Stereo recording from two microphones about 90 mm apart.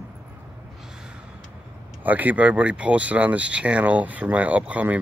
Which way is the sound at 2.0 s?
20° right (ahead or behind).